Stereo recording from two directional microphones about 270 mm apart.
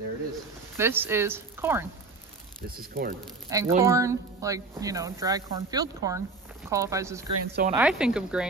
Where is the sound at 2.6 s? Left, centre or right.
Right.